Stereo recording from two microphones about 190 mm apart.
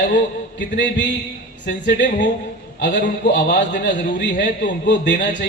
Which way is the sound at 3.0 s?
45° left (ahead or behind).